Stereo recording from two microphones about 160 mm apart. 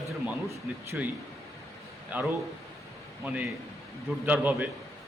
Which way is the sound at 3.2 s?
10° right (ahead or behind).